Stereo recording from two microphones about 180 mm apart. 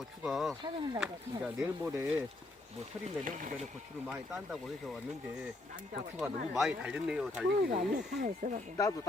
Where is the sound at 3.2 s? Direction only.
45° right (ahead or behind).